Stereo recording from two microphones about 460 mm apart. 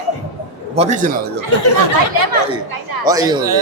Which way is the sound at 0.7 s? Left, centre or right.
Centre.